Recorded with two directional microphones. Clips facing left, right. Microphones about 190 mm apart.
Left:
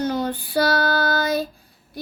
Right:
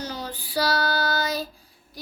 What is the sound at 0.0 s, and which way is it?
Child singing, 55° left (ahead or behind).